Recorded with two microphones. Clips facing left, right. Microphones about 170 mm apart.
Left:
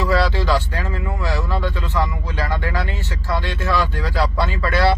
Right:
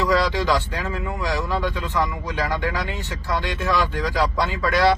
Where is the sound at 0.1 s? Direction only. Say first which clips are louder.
Left 1 dB; 15° right (ahead or behind).